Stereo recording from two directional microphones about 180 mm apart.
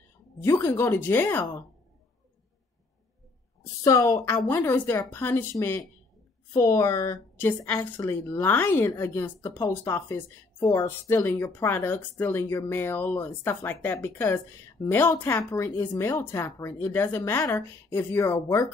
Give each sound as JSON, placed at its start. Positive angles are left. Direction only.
{"t": 0.4, "sound": "a woman's voice", "side_deg": 10}
{"t": 3.8, "sound": "a woman's voice", "side_deg": 15}